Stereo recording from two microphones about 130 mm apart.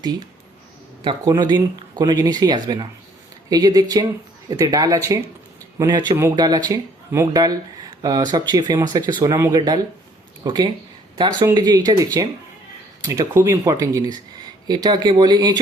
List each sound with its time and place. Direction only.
1.2 s speech: 30° right (ahead or behind)
5.8 s speech: 35° right (ahead or behind)